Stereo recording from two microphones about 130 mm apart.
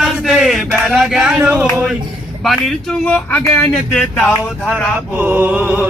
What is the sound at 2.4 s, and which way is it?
Speech, centre (ahead or behind).